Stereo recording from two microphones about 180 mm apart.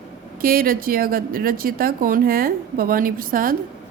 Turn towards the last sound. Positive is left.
turn(degrees=-50)  # may be behind; listen again after turning